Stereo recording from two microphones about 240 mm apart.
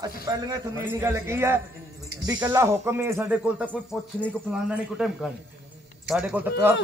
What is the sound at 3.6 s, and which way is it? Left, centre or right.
A man's voice, centre.